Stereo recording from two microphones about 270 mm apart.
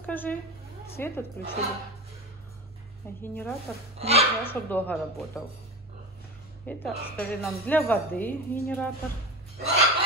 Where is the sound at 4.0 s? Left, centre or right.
Right.